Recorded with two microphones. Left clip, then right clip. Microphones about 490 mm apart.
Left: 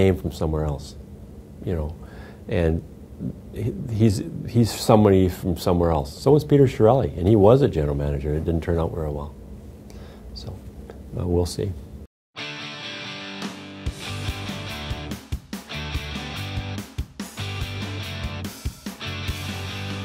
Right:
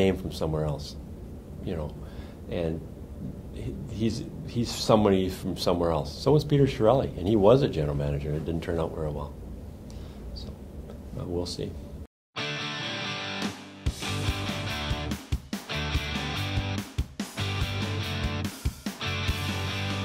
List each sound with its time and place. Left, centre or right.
0.0 s speech: left
11.3 s speech: left
12.4 s music: centre